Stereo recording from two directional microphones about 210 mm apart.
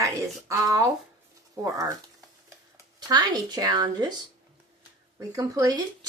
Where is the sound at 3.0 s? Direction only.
20° right (ahead or behind).